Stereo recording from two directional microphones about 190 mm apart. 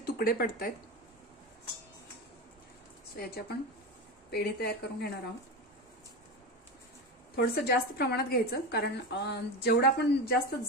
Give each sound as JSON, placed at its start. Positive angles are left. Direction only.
{"t": 0.0, "sound": "speech", "side_deg": 50}
{"t": 3.2, "sound": "a woman's voice", "side_deg": 55}
{"t": 7.3, "sound": "a woman's voice", "side_deg": 60}